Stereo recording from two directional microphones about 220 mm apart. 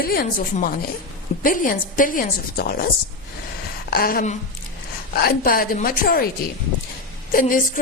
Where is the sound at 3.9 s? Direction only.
40° left (ahead or behind).